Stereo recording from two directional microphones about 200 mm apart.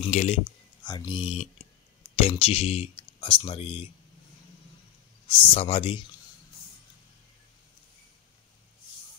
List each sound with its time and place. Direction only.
0.1 s speech: 35° left (ahead or behind)
0.8 s speech: 20° left (ahead or behind)
5.3 s speech: 30° left (ahead or behind)